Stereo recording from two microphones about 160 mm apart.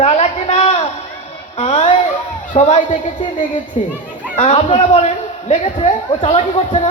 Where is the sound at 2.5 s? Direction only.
50° left (ahead or behind).